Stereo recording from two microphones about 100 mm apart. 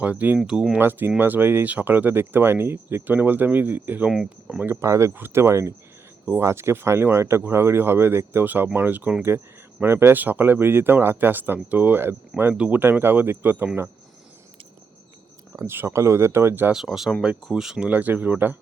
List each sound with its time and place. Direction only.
0.0 s speech: 15° right (ahead or behind)
0.8 s speech: 20° right (ahead or behind)
4.1 s speech: 5° right (ahead or behind)
4.6 s speech: 25° right (ahead or behind)
15.5 s speech: 25° right (ahead or behind)
16.7 s speech: 5° right (ahead or behind)